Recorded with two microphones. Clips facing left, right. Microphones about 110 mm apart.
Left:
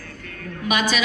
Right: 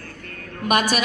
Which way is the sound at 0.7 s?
50° right (ahead or behind).